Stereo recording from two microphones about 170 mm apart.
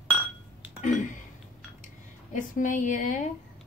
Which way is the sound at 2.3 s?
50° left (ahead or behind).